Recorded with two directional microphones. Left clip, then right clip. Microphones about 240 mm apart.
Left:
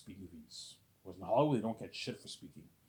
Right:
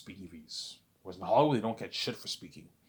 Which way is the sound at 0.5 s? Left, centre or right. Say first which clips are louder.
Right 13 dB; centre.